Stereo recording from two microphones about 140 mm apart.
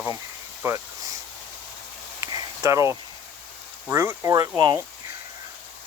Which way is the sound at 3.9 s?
20° right (ahead or behind).